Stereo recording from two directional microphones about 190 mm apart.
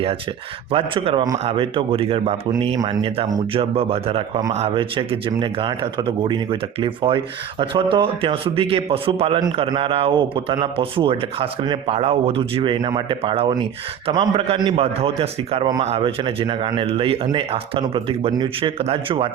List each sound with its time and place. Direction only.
0.7 s speech: 30° right (ahead or behind)
3.6 s speech: 30° right (ahead or behind)